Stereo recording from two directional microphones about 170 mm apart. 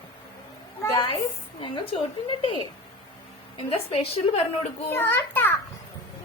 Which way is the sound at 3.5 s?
35° left (ahead or behind).